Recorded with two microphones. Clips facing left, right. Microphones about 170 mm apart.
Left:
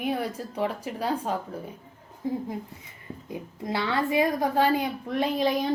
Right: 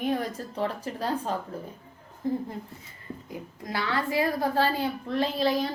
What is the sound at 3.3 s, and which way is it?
A woman's voice, 20° left (ahead or behind).